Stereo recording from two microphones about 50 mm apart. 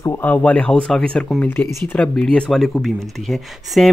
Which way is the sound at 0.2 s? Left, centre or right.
Left.